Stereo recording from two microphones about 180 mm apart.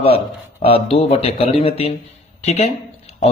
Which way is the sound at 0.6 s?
30° left (ahead or behind).